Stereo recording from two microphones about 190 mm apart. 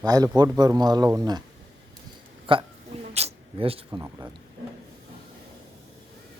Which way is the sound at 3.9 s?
15° right (ahead or behind).